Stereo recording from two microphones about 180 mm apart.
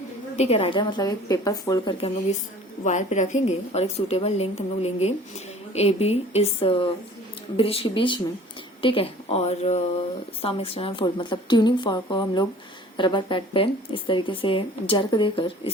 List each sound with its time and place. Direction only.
0.3 s speech: 35° left (ahead or behind)
2.8 s a woman's voice: 40° left (ahead or behind)